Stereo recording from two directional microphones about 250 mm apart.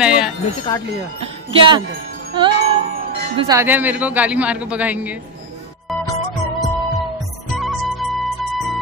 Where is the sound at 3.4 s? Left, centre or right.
Centre.